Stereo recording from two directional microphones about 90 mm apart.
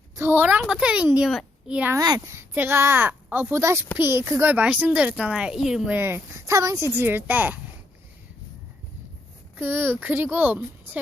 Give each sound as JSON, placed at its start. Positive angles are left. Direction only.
{"t": 0.2, "sound": "a child's voice", "side_deg": -25}
{"t": 1.6, "sound": "speech", "side_deg": -10}
{"t": 2.0, "sound": "speech", "side_deg": -45}
{"t": 2.3, "sound": "a woman's voice", "side_deg": -25}
{"t": 4.5, "sound": "speech", "side_deg": -15}
{"t": 5.9, "sound": "a child's voice", "side_deg": -25}
{"t": 6.4, "sound": "a child's voice", "side_deg": -35}
{"t": 9.6, "sound": "a child's voice", "side_deg": -20}